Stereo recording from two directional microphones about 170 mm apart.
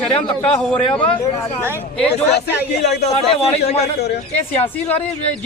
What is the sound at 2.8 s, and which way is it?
Speech, 70° left (ahead or behind).